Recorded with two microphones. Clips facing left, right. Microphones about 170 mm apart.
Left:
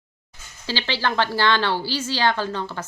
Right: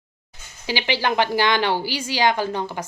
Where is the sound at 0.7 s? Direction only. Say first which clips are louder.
Right 2 dB; 15° right (ahead or behind).